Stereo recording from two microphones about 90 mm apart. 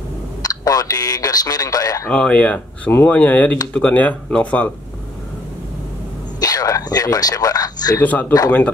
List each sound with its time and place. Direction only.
0.4 s speech: 45° left (ahead or behind)
2.0 s speech: 10° left (ahead or behind)
6.4 s speech: 45° left (ahead or behind)
8.0 s speech: 20° left (ahead or behind)